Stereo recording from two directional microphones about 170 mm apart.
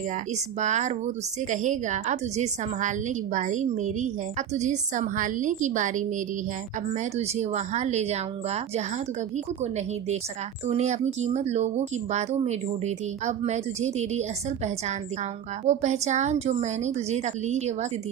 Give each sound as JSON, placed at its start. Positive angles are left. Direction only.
{"t": 0.6, "sound": "a woman's voice", "side_deg": -45}